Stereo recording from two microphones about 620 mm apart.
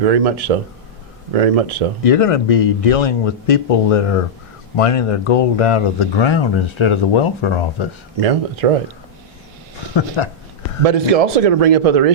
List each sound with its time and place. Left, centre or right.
0.0 s speech: right
2.0 s speech: left
8.2 s speech: right
10.2 s speech: left
10.8 s speech: right